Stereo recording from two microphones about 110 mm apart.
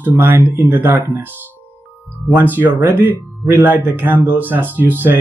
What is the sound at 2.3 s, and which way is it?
Speech, 15° right (ahead or behind).